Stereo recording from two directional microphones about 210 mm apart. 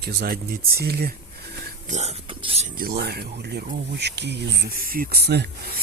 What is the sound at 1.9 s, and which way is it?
Speech, 30° right (ahead or behind).